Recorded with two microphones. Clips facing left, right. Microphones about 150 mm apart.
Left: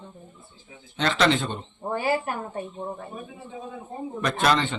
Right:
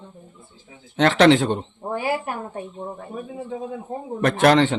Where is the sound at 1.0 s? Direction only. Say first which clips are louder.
Right 8 dB; 65° right (ahead or behind); by 1.6 s 80° right.